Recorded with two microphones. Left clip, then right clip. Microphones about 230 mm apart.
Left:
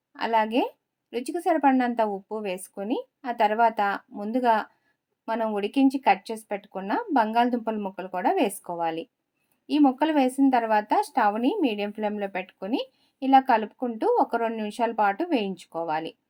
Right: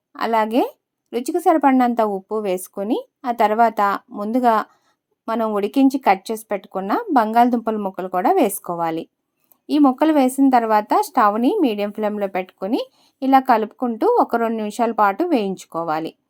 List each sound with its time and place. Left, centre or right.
0.1 s a woman's voice: right